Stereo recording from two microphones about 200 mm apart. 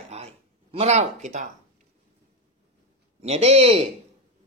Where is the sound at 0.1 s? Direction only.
30° right (ahead or behind).